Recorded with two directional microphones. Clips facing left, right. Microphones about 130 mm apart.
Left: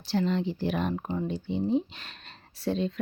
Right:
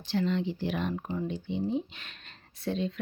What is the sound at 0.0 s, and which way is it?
Speech, 35° left (ahead or behind).